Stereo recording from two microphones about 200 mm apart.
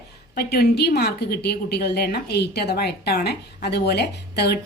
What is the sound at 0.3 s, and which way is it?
A woman's voice, 50° left (ahead or behind).